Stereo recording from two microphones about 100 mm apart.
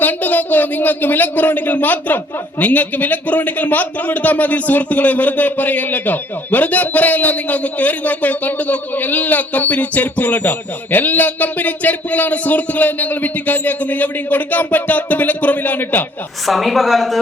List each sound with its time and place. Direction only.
0.0 s a man's voice: 15° left (ahead or behind)
16.5 s a woman's voice: centre (ahead or behind)